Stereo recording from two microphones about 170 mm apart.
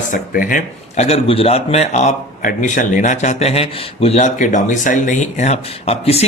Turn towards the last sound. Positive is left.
turn(degrees=35)  # may be behind; listen again after turning